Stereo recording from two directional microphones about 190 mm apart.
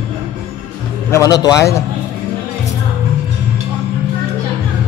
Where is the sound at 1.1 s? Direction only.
20° left (ahead or behind).